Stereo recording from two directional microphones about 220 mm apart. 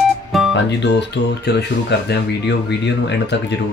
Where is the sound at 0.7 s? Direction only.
50° left (ahead or behind).